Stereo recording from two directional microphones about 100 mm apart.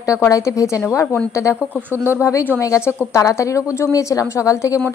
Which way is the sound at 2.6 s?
30° left (ahead or behind).